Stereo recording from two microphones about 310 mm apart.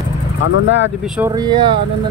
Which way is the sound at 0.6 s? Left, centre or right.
Left.